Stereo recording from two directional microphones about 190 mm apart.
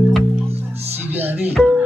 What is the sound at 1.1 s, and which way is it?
Music, 10° right (ahead or behind).